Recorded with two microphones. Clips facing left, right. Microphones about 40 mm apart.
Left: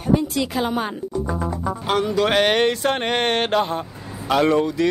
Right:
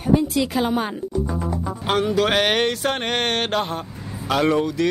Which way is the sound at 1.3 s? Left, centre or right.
Left.